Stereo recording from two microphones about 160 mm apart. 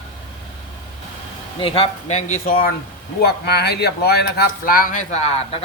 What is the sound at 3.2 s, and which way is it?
Speech, 90° left.